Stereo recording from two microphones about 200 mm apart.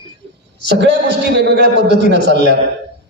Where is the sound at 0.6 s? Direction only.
55° right (ahead or behind).